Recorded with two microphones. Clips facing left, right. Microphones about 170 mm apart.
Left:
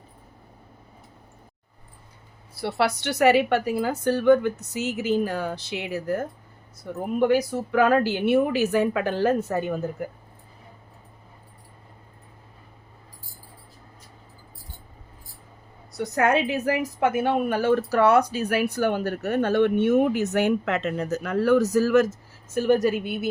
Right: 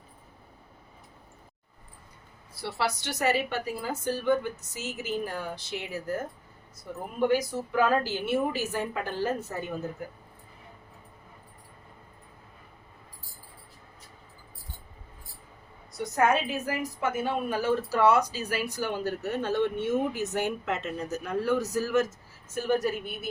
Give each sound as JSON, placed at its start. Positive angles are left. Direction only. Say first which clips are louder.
{"t": 2.6, "sound": "a woman's voice", "louder": "left 6 dB", "side_deg": 65}
{"t": 5.2, "sound": "a woman's voice", "louder": "left 7 dB", "side_deg": 80}
{"t": 7.2, "sound": "a woman's voice", "louder": "left 4 dB", "side_deg": 70}
{"t": 16.1, "sound": "a woman's voice", "louder": "left 3 dB", "side_deg": 70}